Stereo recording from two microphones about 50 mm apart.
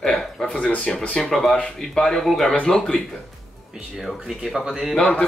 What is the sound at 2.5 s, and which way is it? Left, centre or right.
Speech, centre.